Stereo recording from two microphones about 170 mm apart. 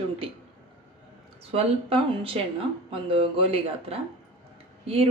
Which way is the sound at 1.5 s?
35° right (ahead or behind).